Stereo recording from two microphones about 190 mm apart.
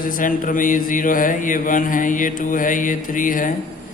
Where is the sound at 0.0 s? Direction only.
45° left (ahead or behind).